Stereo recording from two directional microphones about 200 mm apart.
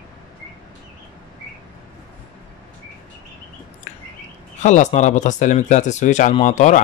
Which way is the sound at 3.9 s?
35° left (ahead or behind).